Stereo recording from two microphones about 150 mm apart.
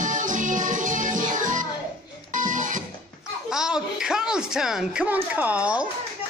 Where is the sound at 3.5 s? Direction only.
5° right (ahead or behind).